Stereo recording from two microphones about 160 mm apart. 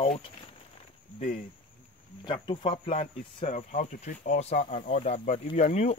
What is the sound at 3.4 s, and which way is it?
Speech, 50° left (ahead or behind).